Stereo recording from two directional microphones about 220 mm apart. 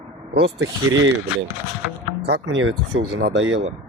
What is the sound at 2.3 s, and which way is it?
Speech, 55° right (ahead or behind).